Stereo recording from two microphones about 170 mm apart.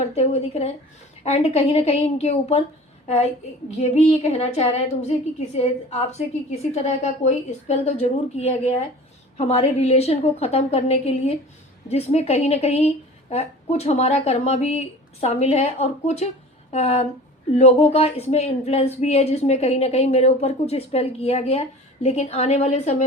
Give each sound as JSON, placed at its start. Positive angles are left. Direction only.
{"t": 0.0, "sound": "speech", "side_deg": 40}
{"t": 3.8, "sound": "speech", "side_deg": 40}